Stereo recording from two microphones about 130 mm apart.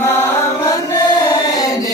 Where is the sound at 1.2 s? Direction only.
25° left (ahead or behind).